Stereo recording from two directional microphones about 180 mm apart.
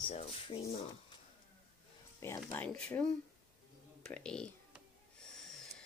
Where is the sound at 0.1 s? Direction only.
35° left (ahead or behind).